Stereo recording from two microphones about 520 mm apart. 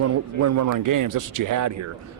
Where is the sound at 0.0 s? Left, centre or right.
Right.